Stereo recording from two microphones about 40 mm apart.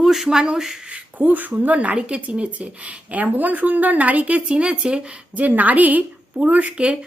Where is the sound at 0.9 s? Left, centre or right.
Right.